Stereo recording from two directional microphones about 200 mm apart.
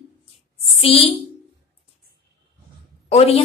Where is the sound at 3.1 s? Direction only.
30° left (ahead or behind).